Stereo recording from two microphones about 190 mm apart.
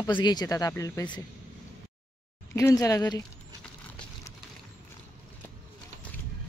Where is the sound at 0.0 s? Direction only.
20° left (ahead or behind).